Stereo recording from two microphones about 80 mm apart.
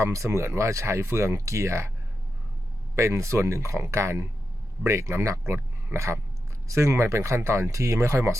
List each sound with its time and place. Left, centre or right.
0.0 s speech: right
2.9 s speech: right